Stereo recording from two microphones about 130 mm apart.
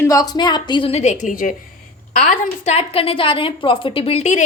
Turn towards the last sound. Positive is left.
turn(degrees=60)  # may be behind; listen again after turning